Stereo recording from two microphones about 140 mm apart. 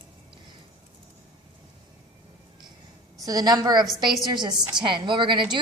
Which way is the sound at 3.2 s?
25° right (ahead or behind).